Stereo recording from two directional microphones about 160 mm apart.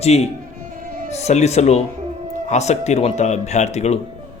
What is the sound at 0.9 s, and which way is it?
Music, 60° right (ahead or behind).